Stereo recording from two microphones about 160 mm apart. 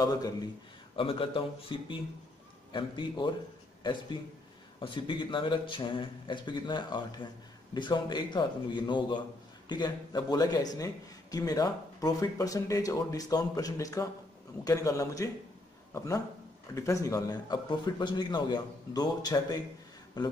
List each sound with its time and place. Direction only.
0.0 s a man's voice: 25° left (ahead or behind)
16.7 s a man's voice: 20° left (ahead or behind)